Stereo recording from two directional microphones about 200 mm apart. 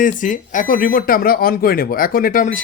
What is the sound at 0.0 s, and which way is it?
Speech, 40° left (ahead or behind).